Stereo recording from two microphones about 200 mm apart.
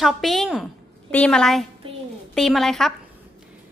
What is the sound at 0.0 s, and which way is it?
A woman's voice, centre (ahead or behind).